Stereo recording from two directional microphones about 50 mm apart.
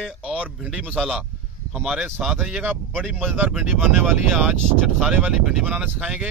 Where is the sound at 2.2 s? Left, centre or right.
Centre.